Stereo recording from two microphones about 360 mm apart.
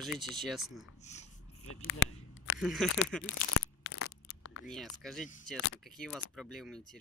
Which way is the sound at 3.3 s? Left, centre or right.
Left.